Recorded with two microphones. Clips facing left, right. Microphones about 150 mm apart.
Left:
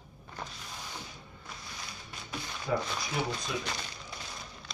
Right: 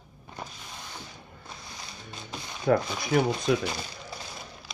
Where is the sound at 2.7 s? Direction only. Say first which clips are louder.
Right 9 dB; 65° right (ahead or behind).